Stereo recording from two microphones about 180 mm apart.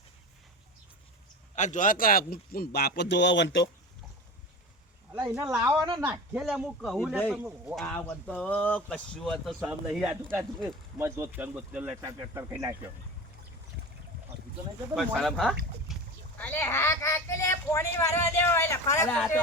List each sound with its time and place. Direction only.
1.5 s speech: 45° left (ahead or behind); by 3.7 s 75° left (ahead or behind)
5.3 s speech: 5° right (ahead or behind)
5.5 s speech: 20° right (ahead or behind)
6.0 s speech: 5° right (ahead or behind)
7.8 s speech: 5° left (ahead or behind); by 12.7 s 15° right (ahead or behind)
14.9 s speech: centre (ahead or behind)
15.9 s boat: centre (ahead or behind)
16.4 s speech: 10° left (ahead or behind)